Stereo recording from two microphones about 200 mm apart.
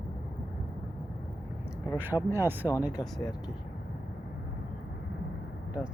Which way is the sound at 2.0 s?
10° right (ahead or behind).